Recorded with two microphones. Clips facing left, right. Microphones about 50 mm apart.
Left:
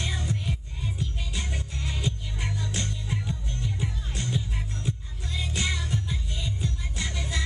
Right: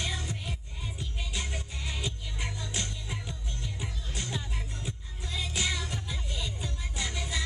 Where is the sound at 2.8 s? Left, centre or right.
Centre.